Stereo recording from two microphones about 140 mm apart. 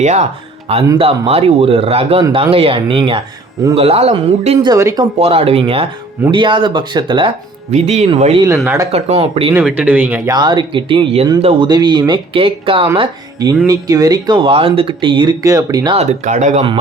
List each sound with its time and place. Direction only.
0.0 s speech: 55° right (ahead or behind)
0.9 s speech: 45° right (ahead or behind)
4.6 s speech: 25° right (ahead or behind)
5.2 s speech: 45° right (ahead or behind)
7.7 s speech: 55° right (ahead or behind)
8.6 s speech: 20° right (ahead or behind)
8.9 s speech: 50° right (ahead or behind)
9.6 s speech: 10° right (ahead or behind)
10.2 s speech: 30° right (ahead or behind)
13.7 s speech: 25° right (ahead or behind)
16.0 s speech: 60° right (ahead or behind)